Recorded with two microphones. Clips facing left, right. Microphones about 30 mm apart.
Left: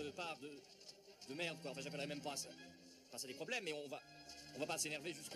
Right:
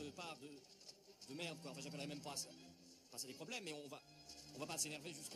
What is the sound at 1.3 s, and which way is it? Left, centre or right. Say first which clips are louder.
A man's voice: left 4 dB; left.